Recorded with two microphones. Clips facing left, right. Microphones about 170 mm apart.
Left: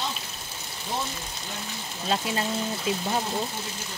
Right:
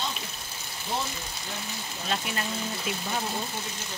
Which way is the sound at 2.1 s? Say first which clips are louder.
Left 4 dB; 25° left (ahead or behind).